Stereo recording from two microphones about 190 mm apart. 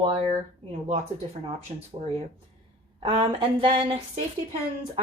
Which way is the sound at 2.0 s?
30° right (ahead or behind).